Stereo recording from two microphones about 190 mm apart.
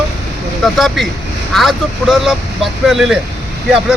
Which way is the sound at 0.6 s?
Centre (ahead or behind).